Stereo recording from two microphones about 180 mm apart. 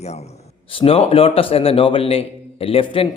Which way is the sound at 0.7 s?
30° left (ahead or behind).